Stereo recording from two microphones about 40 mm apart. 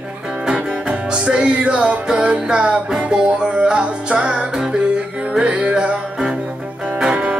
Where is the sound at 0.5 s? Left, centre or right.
Right.